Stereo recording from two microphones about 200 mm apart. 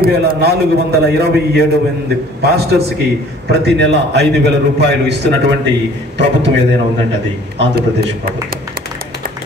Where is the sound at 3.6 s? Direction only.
60° right (ahead or behind).